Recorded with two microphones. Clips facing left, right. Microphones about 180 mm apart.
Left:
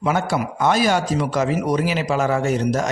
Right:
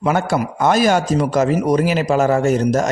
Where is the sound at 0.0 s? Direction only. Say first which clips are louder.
Right 3 dB; 50° right (ahead or behind).